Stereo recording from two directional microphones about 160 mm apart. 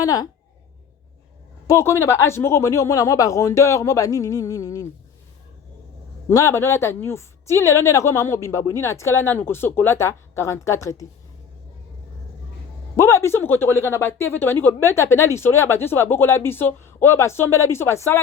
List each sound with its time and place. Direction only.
0.0 s speech: 25° left (ahead or behind)
1.6 s speech: 15° left (ahead or behind)
6.2 s speech: 15° left (ahead or behind)
13.0 s speech: 20° left (ahead or behind)